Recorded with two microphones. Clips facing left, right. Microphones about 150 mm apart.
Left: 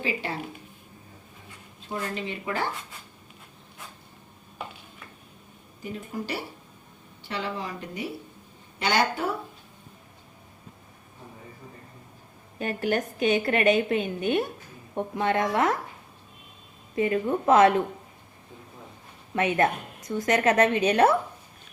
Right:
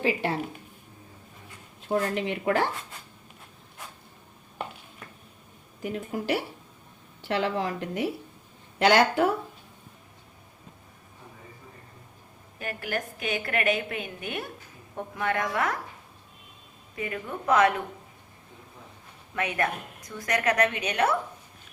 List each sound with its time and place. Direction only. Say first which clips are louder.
0.0 s a woman's voice: right 4 dB; 60° right (ahead or behind)
1.9 s a woman's voice: right 5 dB; 70° right (ahead or behind)
5.8 s a woman's voice: right 3 dB; 90° right
12.5 s a woman's voice: left 6 dB; 25° left (ahead or behind)
16.9 s a woman's voice: left 9 dB; 30° left (ahead or behind)
19.3 s a woman's voice: left 5 dB; 25° left (ahead or behind)